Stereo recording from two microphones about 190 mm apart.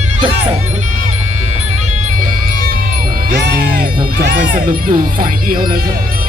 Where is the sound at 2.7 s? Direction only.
50° right (ahead or behind).